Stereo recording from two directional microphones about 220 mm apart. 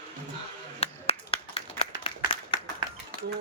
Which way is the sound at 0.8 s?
25° left (ahead or behind).